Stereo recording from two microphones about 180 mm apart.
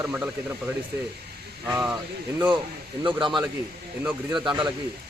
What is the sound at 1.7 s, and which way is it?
Speech, 5° right (ahead or behind).